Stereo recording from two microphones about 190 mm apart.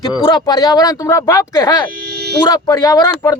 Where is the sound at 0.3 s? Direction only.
20° left (ahead or behind).